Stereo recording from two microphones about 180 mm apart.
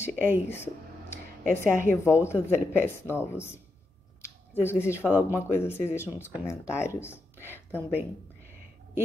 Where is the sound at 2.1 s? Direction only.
15° left (ahead or behind).